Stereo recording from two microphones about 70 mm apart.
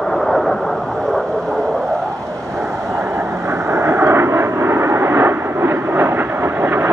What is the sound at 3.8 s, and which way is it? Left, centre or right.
Vehicle, right.